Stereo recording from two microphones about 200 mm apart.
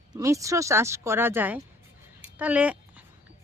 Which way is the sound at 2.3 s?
5° right (ahead or behind).